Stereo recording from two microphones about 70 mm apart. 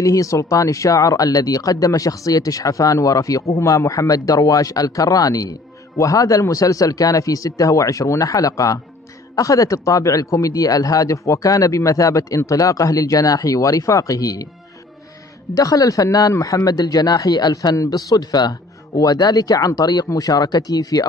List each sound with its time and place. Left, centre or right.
0.0 s speech: left
15.5 s speech: left